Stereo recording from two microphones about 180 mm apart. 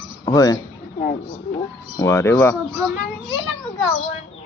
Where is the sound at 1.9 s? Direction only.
15° left (ahead or behind).